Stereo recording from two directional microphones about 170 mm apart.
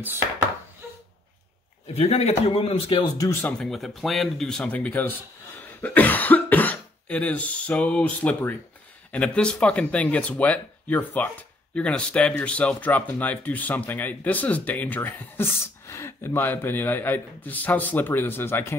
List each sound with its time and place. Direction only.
2.0 s a man's voice: 35° left (ahead or behind)
3.2 s speech: 15° left (ahead or behind)